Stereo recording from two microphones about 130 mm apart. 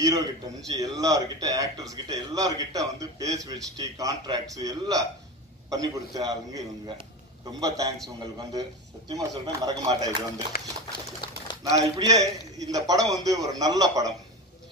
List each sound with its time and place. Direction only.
0.7 s a man's voice: 30° right (ahead or behind)
7.6 s a man's voice: 25° right (ahead or behind)
9.1 s a man's voice: 30° right (ahead or behind)
10.9 s a sound: 35° left (ahead or behind)
11.7 s a man's voice: 25° right (ahead or behind)